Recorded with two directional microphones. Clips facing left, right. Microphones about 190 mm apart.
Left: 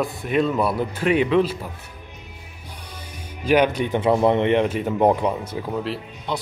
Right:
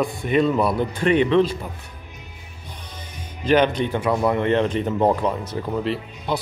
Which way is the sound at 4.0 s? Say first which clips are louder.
Left 4 dB; 25° left (ahead or behind).